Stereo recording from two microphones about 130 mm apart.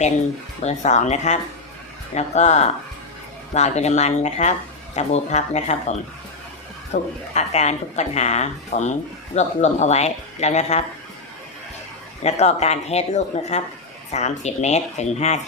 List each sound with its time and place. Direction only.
0.6 s a woman's voice: 60° left (ahead or behind)
6.9 s a woman's voice: 60° left (ahead or behind)
12.2 s a woman's voice: 55° left (ahead or behind)